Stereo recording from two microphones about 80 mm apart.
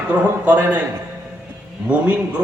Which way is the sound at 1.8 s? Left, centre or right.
Centre.